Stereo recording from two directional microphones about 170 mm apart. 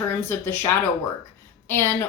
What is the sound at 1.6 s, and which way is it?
Speech, 15° left (ahead or behind).